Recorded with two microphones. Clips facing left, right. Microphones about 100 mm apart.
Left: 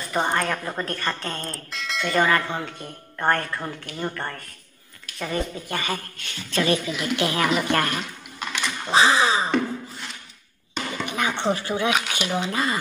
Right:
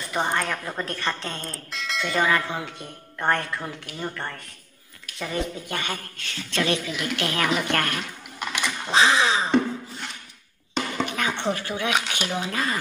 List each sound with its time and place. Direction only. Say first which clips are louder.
0.1 s speech: left 2 dB; centre (ahead or behind)
8.4 s typing: even; 15° right (ahead or behind)
8.9 s speech: left 1 dB; 10° left (ahead or behind)
11.1 s speech: left 2 dB; 15° left (ahead or behind)